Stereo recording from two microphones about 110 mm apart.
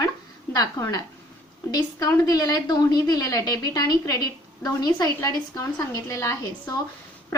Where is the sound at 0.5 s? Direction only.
35° left (ahead or behind).